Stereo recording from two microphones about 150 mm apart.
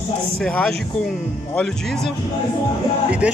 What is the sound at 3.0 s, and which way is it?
Speech, 10° right (ahead or behind).